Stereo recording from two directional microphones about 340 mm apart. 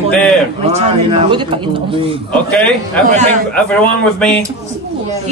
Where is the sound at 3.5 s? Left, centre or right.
Centre.